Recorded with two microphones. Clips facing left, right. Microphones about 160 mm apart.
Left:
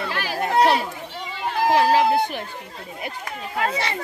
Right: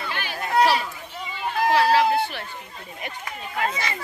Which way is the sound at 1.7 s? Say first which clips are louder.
Left 2 dB; 15° left (ahead or behind).